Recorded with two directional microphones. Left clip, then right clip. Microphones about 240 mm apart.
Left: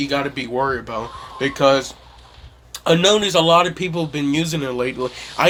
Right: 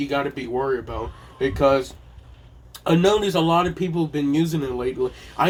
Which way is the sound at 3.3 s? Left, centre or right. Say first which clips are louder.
Left 6 dB; left.